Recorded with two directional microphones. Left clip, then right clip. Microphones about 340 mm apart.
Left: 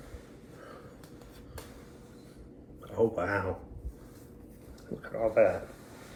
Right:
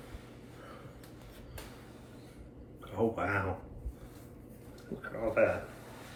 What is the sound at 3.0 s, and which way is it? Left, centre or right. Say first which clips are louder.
Speech: left 3 dB; centre.